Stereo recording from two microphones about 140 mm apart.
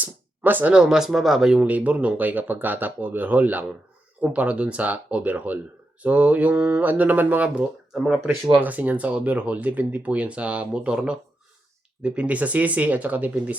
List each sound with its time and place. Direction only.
0.0 s speech: 15° right (ahead or behind)
8.6 s speech: 10° right (ahead or behind)